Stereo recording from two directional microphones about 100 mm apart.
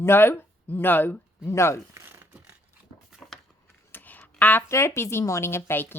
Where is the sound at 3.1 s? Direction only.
5° right (ahead or behind).